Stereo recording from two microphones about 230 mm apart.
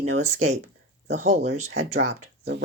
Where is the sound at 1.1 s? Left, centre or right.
Right.